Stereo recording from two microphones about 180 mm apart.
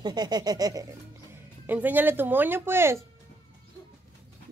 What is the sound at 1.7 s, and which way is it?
Speech, 10° right (ahead or behind).